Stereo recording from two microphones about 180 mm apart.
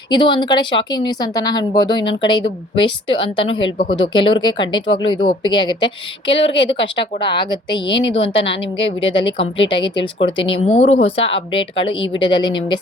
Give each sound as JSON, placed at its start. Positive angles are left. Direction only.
{"t": 0.1, "sound": "speech", "side_deg": 25}